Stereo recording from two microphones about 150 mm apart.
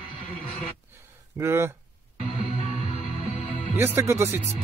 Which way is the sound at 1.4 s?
15° right (ahead or behind).